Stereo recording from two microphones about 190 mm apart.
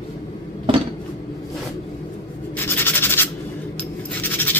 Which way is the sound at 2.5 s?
10° left (ahead or behind).